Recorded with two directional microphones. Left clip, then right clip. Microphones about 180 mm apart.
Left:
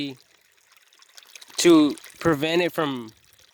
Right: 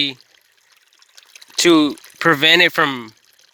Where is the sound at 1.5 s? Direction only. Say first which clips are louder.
Right 3 dB; 5° left (ahead or behind).